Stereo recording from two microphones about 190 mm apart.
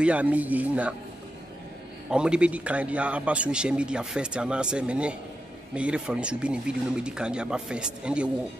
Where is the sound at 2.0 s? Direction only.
5° right (ahead or behind).